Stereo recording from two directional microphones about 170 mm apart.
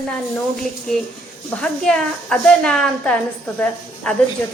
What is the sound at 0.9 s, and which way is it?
A woman's voice, centre (ahead or behind).